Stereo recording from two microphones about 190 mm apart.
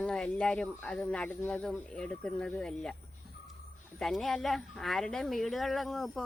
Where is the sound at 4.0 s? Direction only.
Centre (ahead or behind).